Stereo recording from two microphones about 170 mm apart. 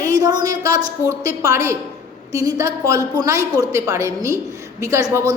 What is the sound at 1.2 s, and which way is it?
A woman's voice, 15° right (ahead or behind).